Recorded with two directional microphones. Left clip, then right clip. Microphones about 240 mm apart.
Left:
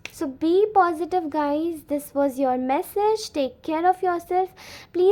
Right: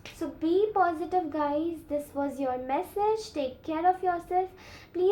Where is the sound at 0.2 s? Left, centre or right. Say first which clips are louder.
Left 6 dB; left.